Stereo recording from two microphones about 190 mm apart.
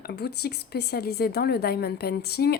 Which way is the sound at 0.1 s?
60° left (ahead or behind).